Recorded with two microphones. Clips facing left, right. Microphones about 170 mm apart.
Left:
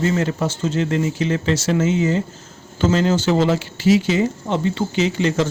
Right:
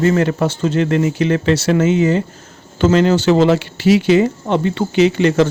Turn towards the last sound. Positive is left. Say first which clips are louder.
# right 6 dB
turn(degrees=-65)  # may be behind; listen again after turning